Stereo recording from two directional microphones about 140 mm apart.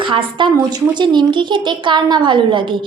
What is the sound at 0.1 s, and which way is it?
Speech, 35° right (ahead or behind).